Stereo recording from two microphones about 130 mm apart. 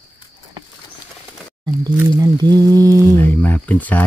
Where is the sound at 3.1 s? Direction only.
10° left (ahead or behind).